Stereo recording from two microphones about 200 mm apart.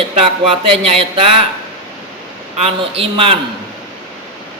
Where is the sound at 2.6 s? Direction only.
30° right (ahead or behind).